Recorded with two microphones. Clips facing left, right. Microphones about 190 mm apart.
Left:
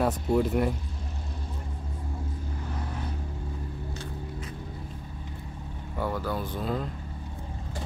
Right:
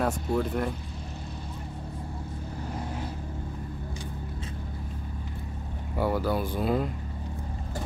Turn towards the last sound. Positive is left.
turn(degrees=-10)  # may be behind; listen again after turning